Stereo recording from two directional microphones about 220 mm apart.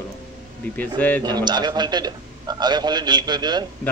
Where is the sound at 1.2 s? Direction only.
20° right (ahead or behind).